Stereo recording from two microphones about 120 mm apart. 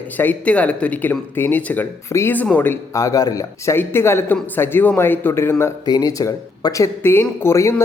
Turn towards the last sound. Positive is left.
turn(degrees=20)  # may be behind; listen again after turning